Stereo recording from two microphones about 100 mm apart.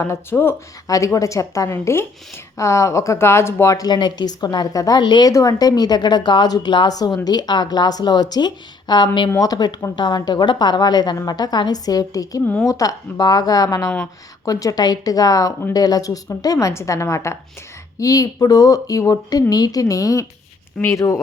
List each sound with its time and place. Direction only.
0.0 s speech: 25° left (ahead or behind); by 5.3 s 50° left (ahead or behind)
5.3 s a woman's voice: 35° left (ahead or behind)